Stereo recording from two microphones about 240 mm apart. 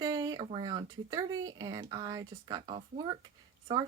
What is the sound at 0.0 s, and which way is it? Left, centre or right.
Speech, centre.